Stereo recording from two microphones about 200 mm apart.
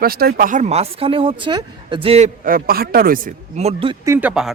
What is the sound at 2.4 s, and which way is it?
Speech, 45° right (ahead or behind).